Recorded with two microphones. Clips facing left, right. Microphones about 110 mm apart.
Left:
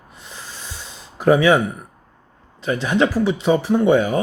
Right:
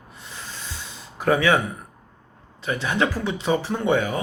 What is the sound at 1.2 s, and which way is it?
Speech, 20° left (ahead or behind).